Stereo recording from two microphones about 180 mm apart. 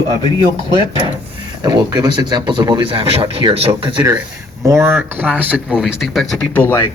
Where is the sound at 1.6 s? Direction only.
20° right (ahead or behind).